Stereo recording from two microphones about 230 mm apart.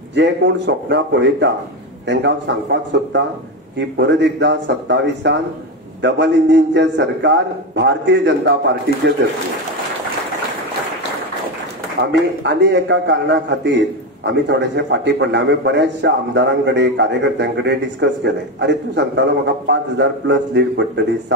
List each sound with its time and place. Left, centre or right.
0.1 s a man's voice: right
12.1 s a man's voice: right